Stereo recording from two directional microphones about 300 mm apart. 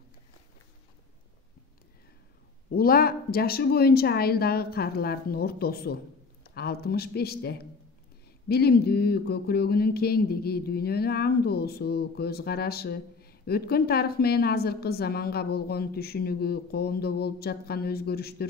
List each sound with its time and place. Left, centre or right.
2.7 s speech: left